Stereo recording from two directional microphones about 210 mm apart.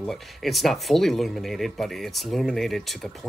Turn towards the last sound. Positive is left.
turn(degrees=0)  # may be behind; listen again after turning